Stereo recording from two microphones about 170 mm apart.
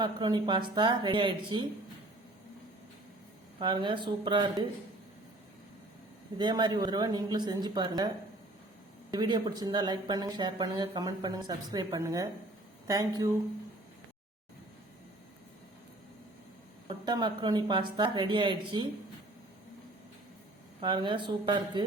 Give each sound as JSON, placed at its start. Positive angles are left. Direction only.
{"t": 0.0, "sound": "speech", "side_deg": -25}
{"t": 3.6, "sound": "speech", "side_deg": -30}
{"t": 6.3, "sound": "speech", "side_deg": -25}
{"t": 9.1, "sound": "speech", "side_deg": -25}
{"t": 17.1, "sound": "speech", "side_deg": -25}
{"t": 20.8, "sound": "speech", "side_deg": -30}